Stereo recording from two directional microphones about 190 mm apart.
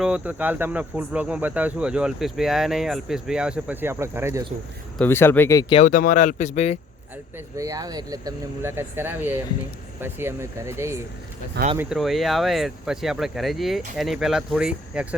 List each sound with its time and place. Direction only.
0.0 s speech: 5° right (ahead or behind)
4.9 s speech: 10° left (ahead or behind)
5.7 s speech: 40° left (ahead or behind)
7.3 s speech: 15° right (ahead or behind)
11.8 s speech: centre (ahead or behind)